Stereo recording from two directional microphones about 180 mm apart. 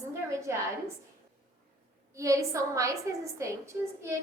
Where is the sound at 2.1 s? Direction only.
15° right (ahead or behind).